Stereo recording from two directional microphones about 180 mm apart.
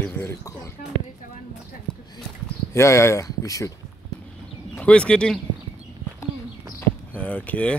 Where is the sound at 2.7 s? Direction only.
15° left (ahead or behind).